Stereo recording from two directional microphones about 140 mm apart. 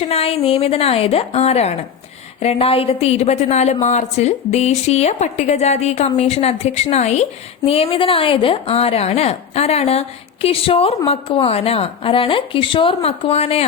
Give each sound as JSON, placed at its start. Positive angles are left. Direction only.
{"t": 0.0, "sound": "a woman's voice", "side_deg": 45}